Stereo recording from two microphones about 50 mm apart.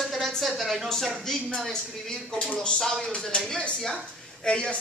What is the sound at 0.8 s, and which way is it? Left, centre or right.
A woman's voice, centre.